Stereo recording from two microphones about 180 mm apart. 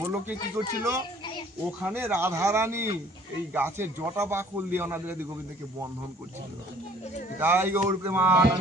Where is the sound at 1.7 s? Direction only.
10° right (ahead or behind).